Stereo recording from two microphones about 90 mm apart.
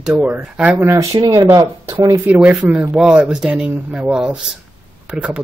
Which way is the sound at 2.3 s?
15° right (ahead or behind).